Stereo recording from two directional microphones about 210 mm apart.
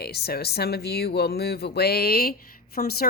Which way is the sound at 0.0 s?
50° left (ahead or behind).